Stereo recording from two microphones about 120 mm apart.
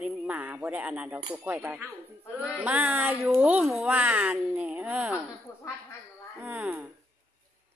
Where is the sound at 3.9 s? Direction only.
15° right (ahead or behind).